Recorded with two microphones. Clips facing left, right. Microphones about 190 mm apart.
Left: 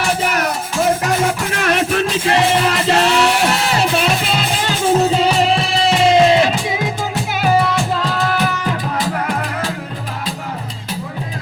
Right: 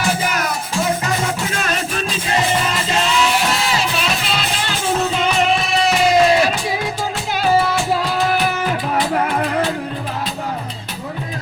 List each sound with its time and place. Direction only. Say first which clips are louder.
1.5 s music: left 5 dB; 65° left (ahead or behind); by 6.7 s 20° left (ahead or behind)
7.6 s music: even; 5° right (ahead or behind)